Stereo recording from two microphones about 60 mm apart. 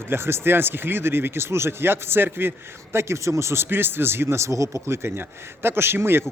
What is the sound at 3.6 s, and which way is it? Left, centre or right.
Speech, right.